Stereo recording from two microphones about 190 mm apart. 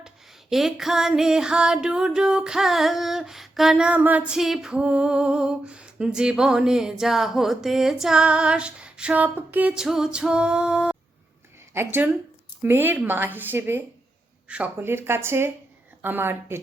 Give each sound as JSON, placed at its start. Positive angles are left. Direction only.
{"t": 0.5, "sound": "music", "side_deg": 0}
{"t": 11.7, "sound": "speech", "side_deg": -10}